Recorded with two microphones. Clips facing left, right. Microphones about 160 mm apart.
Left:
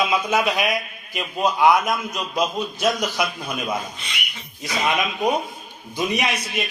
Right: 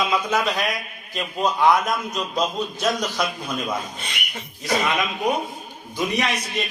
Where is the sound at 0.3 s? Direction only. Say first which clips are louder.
Left 2 dB; 10° left (ahead or behind).